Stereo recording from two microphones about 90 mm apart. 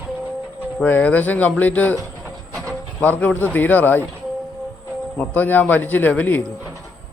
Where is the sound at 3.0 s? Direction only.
20° left (ahead or behind).